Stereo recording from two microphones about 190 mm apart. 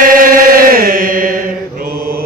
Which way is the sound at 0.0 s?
45° right (ahead or behind).